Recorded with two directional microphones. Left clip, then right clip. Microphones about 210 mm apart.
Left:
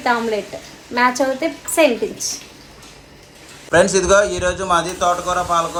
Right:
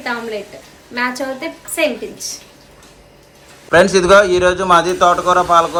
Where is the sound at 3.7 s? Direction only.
10° left (ahead or behind).